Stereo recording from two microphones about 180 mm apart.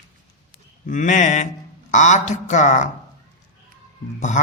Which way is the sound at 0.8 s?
45° left (ahead or behind).